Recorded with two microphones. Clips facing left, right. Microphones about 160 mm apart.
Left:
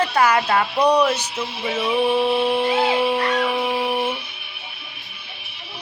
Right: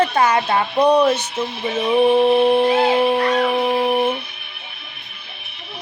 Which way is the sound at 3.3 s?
45° right (ahead or behind).